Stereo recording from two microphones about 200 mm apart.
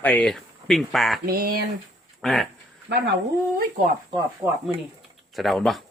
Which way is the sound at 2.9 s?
60° right (ahead or behind).